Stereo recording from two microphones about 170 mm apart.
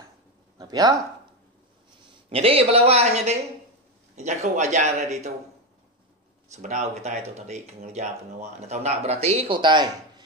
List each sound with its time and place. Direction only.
0.6 s speech: 20° right (ahead or behind)
2.2 s speech: 35° right (ahead or behind)
6.5 s speech: 40° right (ahead or behind); by 10.2 s 25° right (ahead or behind)